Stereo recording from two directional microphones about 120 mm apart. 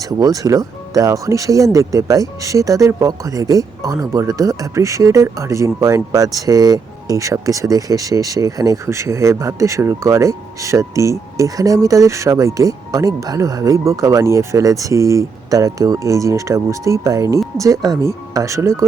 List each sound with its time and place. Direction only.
0.2 s speech: 30° right (ahead or behind)